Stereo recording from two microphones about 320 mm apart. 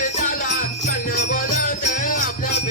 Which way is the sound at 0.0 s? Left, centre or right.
Left.